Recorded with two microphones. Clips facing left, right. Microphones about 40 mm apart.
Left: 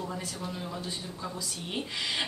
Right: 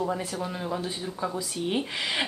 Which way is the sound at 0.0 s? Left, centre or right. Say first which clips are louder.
Right 7 dB; right.